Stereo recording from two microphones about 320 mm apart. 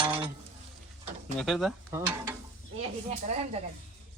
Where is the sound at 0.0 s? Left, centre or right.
Centre.